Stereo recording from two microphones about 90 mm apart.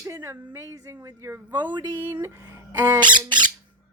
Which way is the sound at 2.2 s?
30° right (ahead or behind).